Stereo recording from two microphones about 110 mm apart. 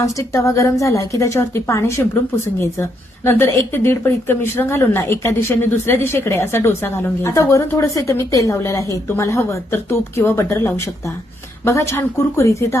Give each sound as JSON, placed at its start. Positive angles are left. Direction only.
{"t": 0.0, "sound": "a woman's voice", "side_deg": 30}
{"t": 3.2, "sound": "a woman's voice", "side_deg": 20}